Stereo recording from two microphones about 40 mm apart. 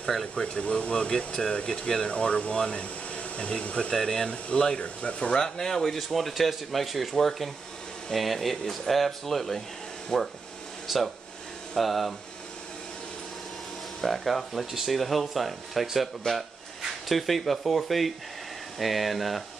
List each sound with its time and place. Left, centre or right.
0.4 s speech: left
4.0 s speech: centre
4.3 s speech: left
5.3 s speech: centre
10.9 s speech: centre
14.0 s speech: centre